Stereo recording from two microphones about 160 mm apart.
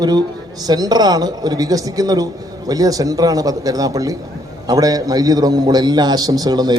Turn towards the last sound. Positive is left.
turn(degrees=-25)  # may be behind; listen again after turning